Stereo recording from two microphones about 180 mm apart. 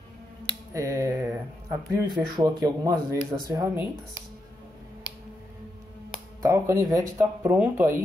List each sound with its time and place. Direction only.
0.7 s a sound: 20° right (ahead or behind)
1.9 s speech: 25° right (ahead or behind)
6.4 s speech: 15° right (ahead or behind)